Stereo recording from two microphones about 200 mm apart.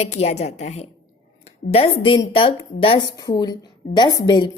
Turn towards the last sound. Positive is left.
turn(degrees=20)  # may be behind; listen again after turning